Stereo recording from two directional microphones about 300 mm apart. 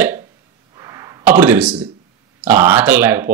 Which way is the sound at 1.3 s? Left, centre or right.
Centre.